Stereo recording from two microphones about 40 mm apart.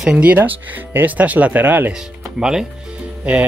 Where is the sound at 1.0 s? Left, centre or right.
Right.